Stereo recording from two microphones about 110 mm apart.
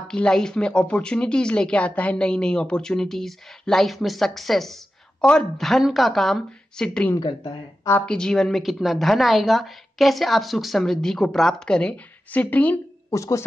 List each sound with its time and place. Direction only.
0.1 s a woman's voice: 5° left (ahead or behind)
7.2 s a woman's voice: 50° left (ahead or behind)
8.0 s a woman's voice: 5° left (ahead or behind)
13.1 s speech: 30° left (ahead or behind)